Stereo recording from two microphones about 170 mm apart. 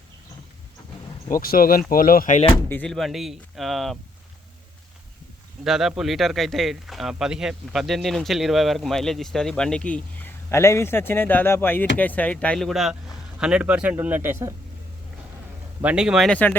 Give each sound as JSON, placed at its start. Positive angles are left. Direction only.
{"t": 1.3, "sound": "speech", "side_deg": 60}
{"t": 2.5, "sound": "speech", "side_deg": 10}
{"t": 5.6, "sound": "speech", "side_deg": 0}
{"t": 15.8, "sound": "speech", "side_deg": -5}